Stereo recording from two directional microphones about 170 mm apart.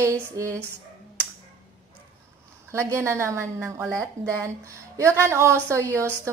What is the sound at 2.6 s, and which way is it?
A woman's voice, 15° right (ahead or behind).